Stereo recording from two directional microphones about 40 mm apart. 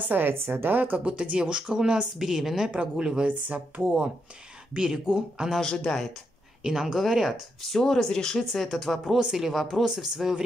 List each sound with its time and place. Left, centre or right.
0.3 s a woman's voice: right
0.7 s speech: right
1.0 s speech: right
1.4 s speech: centre
2.1 s a woman's voice: centre
3.3 s speech: right
4.7 s a woman's voice: centre
5.6 s speech: centre
6.6 s a woman's voice: centre
7.8 s speech: centre
8.7 s a woman's voice: centre